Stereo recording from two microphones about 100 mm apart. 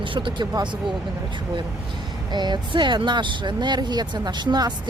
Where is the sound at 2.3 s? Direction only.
45° right (ahead or behind).